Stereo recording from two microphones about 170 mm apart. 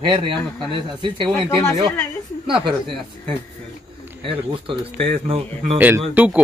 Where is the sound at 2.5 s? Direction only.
30° right (ahead or behind).